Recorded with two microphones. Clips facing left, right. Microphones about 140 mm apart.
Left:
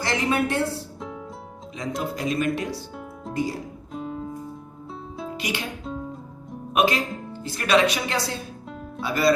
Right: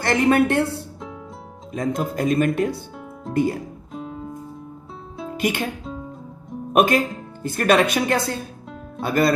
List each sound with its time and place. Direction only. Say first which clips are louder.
0.0 s a woman's voice: right 6 dB; 55° right (ahead or behind)
1.7 s speech: right 5 dB; 50° right (ahead or behind)
3.3 s music: right 6 dB; centre (ahead or behind)
5.4 s speech: right 8 dB; 50° right (ahead or behind)
5.8 s music: left 1 dB; centre (ahead or behind)
6.7 s speech: right 4 dB; 50° right (ahead or behind)